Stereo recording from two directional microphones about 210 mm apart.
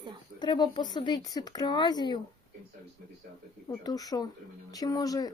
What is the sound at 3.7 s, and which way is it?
Speech, 15° left (ahead or behind).